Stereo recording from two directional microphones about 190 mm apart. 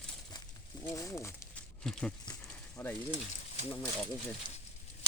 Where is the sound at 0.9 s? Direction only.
15° left (ahead or behind).